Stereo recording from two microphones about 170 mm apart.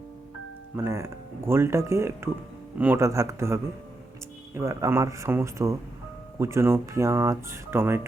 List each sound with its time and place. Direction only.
0.8 s speech: 15° right (ahead or behind)